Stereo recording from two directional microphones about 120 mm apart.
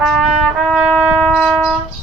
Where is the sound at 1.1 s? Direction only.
5° left (ahead or behind).